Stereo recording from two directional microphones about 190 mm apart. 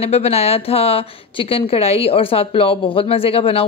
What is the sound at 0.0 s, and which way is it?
A woman's voice, 30° left (ahead or behind).